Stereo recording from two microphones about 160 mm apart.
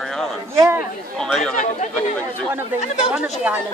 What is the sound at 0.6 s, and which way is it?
Chatter, 15° right (ahead or behind).